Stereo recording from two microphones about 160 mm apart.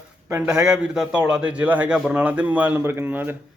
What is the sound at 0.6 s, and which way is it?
A man's voice, 5° right (ahead or behind).